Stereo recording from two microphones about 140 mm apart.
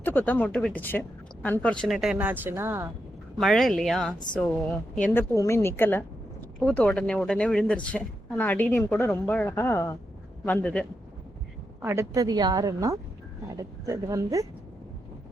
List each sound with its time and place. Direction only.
0.0 s a woman's voice: 15° left (ahead or behind); by 2.9 s 20° right (ahead or behind)
3.3 s a woman's voice: centre (ahead or behind)
5.3 s a woman's voice: 20° left (ahead or behind)
11.8 s speech: 15° right (ahead or behind)